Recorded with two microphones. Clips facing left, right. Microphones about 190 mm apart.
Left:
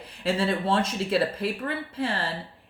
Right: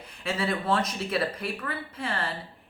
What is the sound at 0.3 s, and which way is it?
Speech, 30° left (ahead or behind).